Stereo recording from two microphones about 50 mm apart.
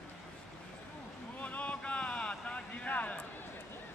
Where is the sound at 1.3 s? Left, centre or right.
Left.